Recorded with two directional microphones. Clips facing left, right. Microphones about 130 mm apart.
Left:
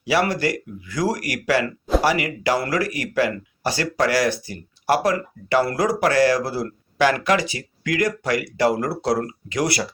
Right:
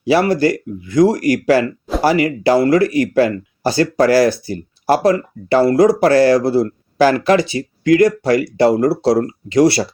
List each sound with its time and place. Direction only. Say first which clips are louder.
0.0 s speech: right 7 dB; 30° right (ahead or behind)